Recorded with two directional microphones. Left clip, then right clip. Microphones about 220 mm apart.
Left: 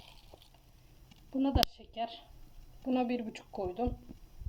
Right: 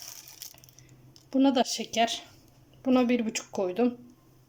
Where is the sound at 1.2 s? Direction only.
10° right (ahead or behind).